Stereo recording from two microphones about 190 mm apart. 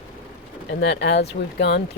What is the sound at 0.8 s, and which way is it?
Speech, 65° left (ahead or behind).